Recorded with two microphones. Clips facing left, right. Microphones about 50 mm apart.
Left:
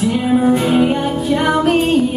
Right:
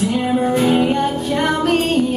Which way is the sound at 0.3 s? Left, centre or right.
Centre.